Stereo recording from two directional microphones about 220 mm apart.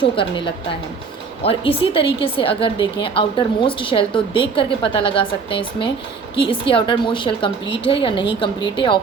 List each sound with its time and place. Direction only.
0.0 s a woman's voice: 20° left (ahead or behind)